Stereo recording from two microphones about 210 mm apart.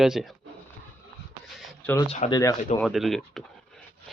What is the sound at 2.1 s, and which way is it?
Speech, 30° left (ahead or behind).